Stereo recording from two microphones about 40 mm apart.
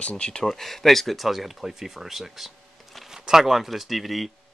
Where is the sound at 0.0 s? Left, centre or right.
Left.